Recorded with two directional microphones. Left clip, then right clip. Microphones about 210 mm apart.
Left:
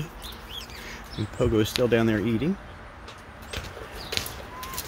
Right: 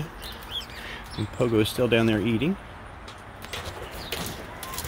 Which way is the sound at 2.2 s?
40° left (ahead or behind).